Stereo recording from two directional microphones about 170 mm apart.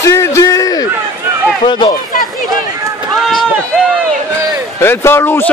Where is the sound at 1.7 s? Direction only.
25° left (ahead or behind).